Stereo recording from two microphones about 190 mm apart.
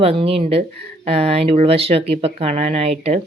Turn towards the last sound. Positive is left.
turn(degrees=-35)  # may be behind; listen again after turning